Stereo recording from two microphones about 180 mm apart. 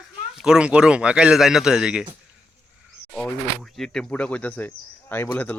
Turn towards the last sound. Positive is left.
turn(degrees=10)  # may be behind; listen again after turning